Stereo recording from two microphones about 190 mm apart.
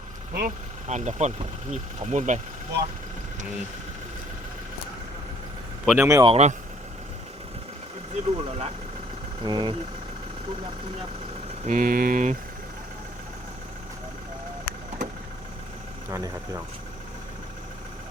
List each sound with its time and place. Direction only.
0.3 s speech: 45° right (ahead or behind)
5.8 s speech: 5° right (ahead or behind)
6.1 s speech: 15° right (ahead or behind)
6.3 s speech: 35° right (ahead or behind)
8.1 s speech: 35° right (ahead or behind)
9.4 s speech: 20° right (ahead or behind)
11.6 s speech: 45° right (ahead or behind)
16.0 s speech: 15° right (ahead or behind)